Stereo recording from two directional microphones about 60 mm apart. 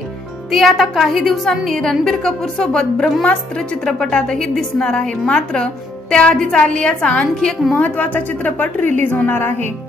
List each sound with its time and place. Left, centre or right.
0.5 s a woman's voice: centre
7.3 s a woman's voice: centre
7.7 s a woman's voice: left